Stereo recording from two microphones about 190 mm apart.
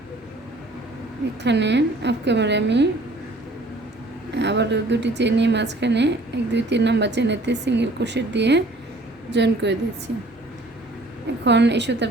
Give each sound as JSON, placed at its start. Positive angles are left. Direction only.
{"t": 1.5, "sound": "a woman's voice", "side_deg": -65}
{"t": 4.4, "sound": "a woman's voice", "side_deg": -65}
{"t": 11.4, "sound": "a woman's voice", "side_deg": -65}